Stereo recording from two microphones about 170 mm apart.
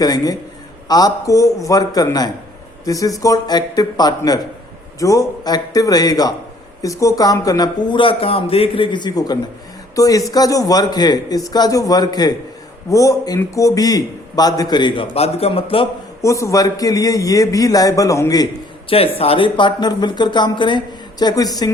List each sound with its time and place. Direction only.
0.0 s a man's voice: 25° left (ahead or behind)
16.2 s a man's voice: 20° left (ahead or behind)
18.9 s a man's voice: 35° left (ahead or behind)